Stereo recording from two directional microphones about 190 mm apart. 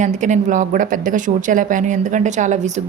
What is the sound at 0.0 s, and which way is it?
A woman's voice, 40° right (ahead or behind).